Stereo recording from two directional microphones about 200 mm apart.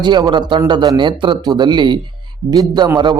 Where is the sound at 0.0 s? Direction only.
20° right (ahead or behind).